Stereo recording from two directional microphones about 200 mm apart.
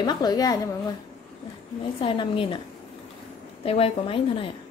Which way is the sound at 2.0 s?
25° left (ahead or behind).